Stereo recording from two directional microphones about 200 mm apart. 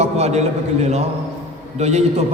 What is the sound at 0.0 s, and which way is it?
A man's voice, 35° right (ahead or behind).